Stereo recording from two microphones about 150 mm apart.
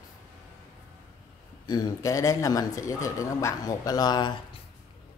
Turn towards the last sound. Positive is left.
turn(degrees=25)  # may be behind; listen again after turning